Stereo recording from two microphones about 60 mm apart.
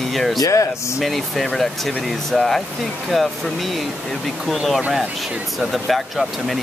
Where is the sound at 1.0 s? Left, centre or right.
Centre.